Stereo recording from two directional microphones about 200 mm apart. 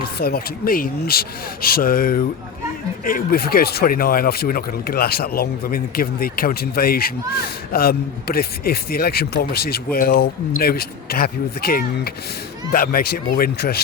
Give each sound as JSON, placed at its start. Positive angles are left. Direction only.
{"t": 0.2, "sound": "speech", "side_deg": 50}